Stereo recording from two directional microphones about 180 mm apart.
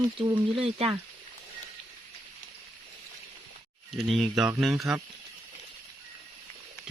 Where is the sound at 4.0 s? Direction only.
Centre (ahead or behind).